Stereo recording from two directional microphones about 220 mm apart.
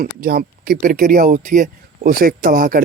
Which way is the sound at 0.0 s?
45° right (ahead or behind).